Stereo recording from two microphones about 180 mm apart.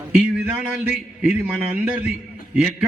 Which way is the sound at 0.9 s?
5° right (ahead or behind).